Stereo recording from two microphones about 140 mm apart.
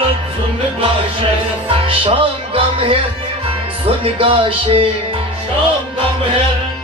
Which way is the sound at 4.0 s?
40° right (ahead or behind).